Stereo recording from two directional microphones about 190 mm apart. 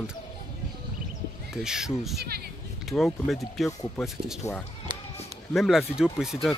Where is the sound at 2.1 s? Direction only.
55° right (ahead or behind).